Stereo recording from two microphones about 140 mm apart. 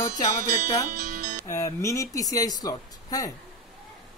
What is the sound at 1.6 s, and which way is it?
Speech, 25° left (ahead or behind).